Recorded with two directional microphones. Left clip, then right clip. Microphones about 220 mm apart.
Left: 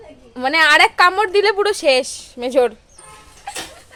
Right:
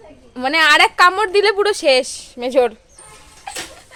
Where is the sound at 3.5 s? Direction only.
5° right (ahead or behind).